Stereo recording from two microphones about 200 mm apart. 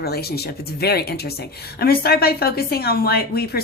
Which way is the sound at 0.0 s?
50° left (ahead or behind).